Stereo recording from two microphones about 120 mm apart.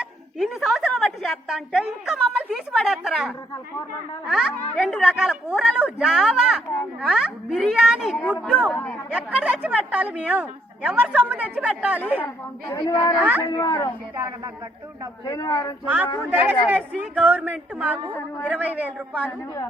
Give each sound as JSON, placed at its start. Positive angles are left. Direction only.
{"t": 0.3, "sound": "a woman's voice", "side_deg": 0}
{"t": 8.7, "sound": "speech", "side_deg": 10}
{"t": 9.1, "sound": "a woman's voice", "side_deg": -10}
{"t": 12.2, "sound": "a woman's voice", "side_deg": 20}
{"t": 13.1, "sound": "a woman's voice", "side_deg": -15}
{"t": 13.6, "sound": "a woman's voice", "side_deg": 25}
{"t": 14.2, "sound": "speech", "side_deg": -25}
{"t": 15.2, "sound": "a man's voice", "side_deg": 30}
{"t": 16.2, "sound": "a woman's voice", "side_deg": -15}